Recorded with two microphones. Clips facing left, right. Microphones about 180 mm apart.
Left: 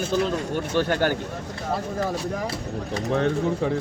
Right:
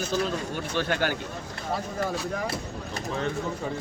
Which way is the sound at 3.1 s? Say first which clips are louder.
Left 7 dB; 65° left (ahead or behind).